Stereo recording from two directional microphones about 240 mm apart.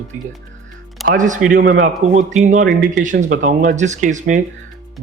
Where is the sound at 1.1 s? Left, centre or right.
Right.